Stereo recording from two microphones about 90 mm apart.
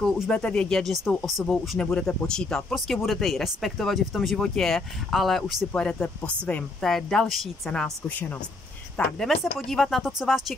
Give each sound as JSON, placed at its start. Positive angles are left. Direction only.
{"t": 0.3, "sound": "speech", "side_deg": 10}
{"t": 5.7, "sound": "speech", "side_deg": 10}
{"t": 9.2, "sound": "speech", "side_deg": 0}